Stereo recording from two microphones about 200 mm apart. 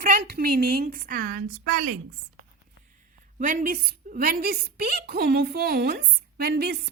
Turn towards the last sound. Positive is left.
turn(degrees=-50)  # may be behind; listen again after turning